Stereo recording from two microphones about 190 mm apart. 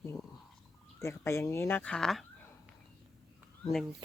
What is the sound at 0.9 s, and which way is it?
Speech, 15° left (ahead or behind).